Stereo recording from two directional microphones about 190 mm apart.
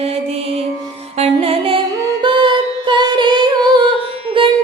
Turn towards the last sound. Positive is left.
turn(degrees=-25)  # may be behind; listen again after turning